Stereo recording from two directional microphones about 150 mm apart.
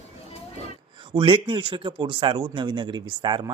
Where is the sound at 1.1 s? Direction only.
35° right (ahead or behind).